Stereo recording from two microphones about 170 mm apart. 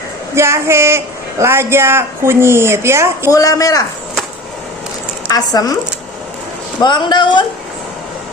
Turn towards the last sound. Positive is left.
turn(degrees=25)  # may be behind; listen again after turning